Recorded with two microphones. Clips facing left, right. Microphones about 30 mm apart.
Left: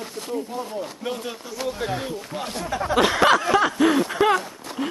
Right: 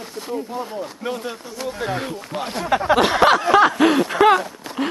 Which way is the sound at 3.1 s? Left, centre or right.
Centre.